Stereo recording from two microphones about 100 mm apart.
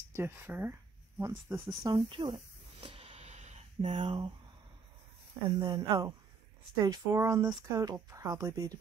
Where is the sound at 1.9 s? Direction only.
60° right (ahead or behind).